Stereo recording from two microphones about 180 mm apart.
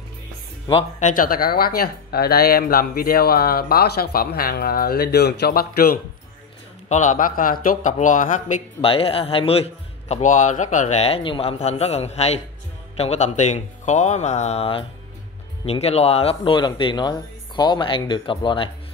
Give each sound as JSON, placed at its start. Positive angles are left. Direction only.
{"t": 0.9, "sound": "speech", "side_deg": 45}
{"t": 6.9, "sound": "speech", "side_deg": 45}
{"t": 8.8, "sound": "speech", "side_deg": 30}